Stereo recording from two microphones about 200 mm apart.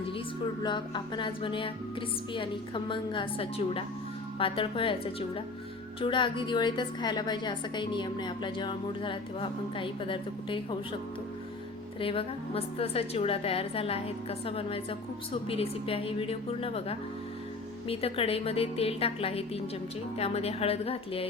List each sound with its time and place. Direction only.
0.6 s a woman's voice: 20° left (ahead or behind)
11.9 s a woman's voice: 25° left (ahead or behind)